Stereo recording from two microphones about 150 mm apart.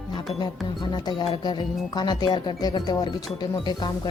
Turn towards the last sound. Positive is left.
turn(degrees=30)  # may be behind; listen again after turning